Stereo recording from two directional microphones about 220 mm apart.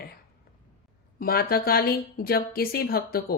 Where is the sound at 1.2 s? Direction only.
45° left (ahead or behind).